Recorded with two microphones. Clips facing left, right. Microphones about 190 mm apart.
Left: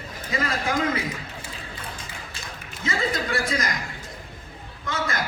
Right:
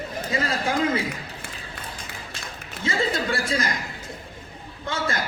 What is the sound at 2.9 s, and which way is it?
Chuckle, 30° right (ahead or behind).